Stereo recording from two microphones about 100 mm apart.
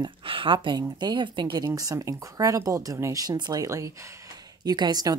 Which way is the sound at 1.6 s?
35° right (ahead or behind).